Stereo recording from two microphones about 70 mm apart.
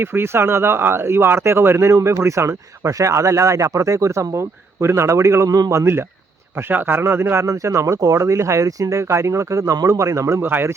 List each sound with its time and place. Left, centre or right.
0.0 s speech: right
5.7 s speech: right